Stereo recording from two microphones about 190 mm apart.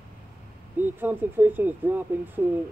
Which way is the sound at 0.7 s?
10° right (ahead or behind).